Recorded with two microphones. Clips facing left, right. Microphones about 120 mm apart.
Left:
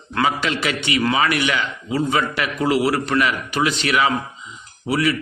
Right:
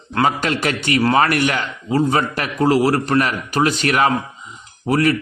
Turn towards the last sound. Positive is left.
turn(degrees=-45)  # may be behind; listen again after turning